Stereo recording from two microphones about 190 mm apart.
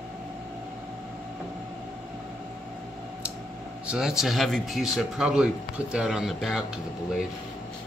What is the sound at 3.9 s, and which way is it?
Speech, 5° right (ahead or behind).